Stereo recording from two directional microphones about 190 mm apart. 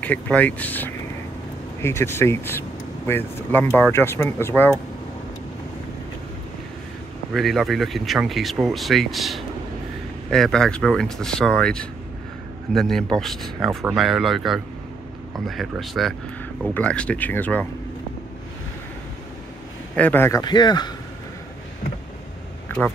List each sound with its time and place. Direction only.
0.0 s speech: 10° left (ahead or behind)
7.3 s speech: centre (ahead or behind)
20.0 s speech: 10° left (ahead or behind)
22.7 s a sound: 10° left (ahead or behind)